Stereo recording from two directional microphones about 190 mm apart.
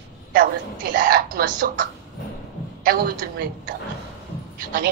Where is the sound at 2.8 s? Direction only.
50° right (ahead or behind).